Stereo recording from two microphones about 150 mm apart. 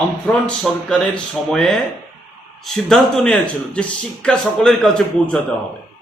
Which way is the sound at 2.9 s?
5° left (ahead or behind).